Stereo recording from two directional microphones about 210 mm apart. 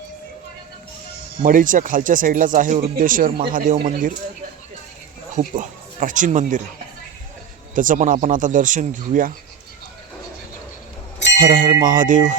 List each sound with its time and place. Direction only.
1.4 s speech: 40° right (ahead or behind)
5.3 s speech: 35° right (ahead or behind)
7.8 s speech: 40° right (ahead or behind)
11.3 s speech: 40° right (ahead or behind)